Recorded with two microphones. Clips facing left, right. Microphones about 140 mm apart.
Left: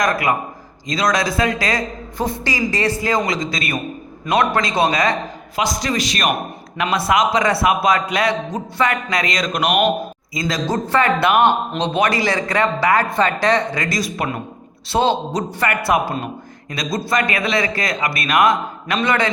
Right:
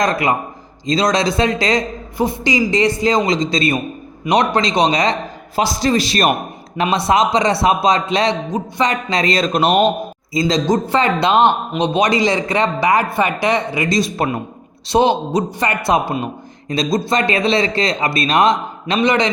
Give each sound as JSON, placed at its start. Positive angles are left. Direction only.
{"t": 0.0, "sound": "speech", "side_deg": -25}
{"t": 2.1, "sound": "a man's voice", "side_deg": -10}
{"t": 8.4, "sound": "a man's voice", "side_deg": -10}
{"t": 8.9, "sound": "speech", "side_deg": -25}
{"t": 10.7, "sound": "a man's voice", "side_deg": -15}
{"t": 13.9, "sound": "a man's voice", "side_deg": -25}